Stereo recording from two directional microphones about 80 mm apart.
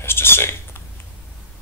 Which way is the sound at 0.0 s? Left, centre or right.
Left.